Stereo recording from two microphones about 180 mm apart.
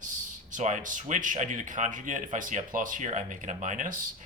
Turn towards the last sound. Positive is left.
turn(degrees=-45)  # may be behind; listen again after turning